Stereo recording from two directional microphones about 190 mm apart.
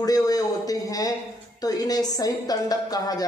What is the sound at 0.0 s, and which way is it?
A man's voice, 20° left (ahead or behind).